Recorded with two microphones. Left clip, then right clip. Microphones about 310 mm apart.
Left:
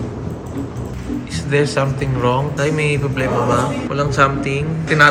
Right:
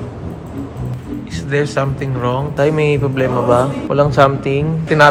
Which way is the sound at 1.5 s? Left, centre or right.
Centre.